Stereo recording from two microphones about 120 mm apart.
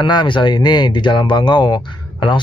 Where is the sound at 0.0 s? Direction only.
40° left (ahead or behind).